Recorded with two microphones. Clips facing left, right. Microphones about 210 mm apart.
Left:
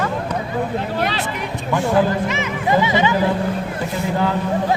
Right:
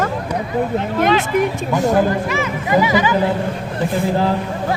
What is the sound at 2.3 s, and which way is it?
Speech, 25° left (ahead or behind).